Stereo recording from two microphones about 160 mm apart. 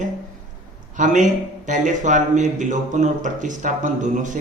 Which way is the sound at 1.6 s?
50° right (ahead or behind).